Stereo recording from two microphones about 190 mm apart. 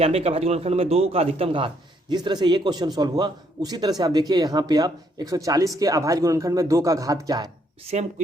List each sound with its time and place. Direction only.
0.0 s a man's voice: 30° right (ahead or behind)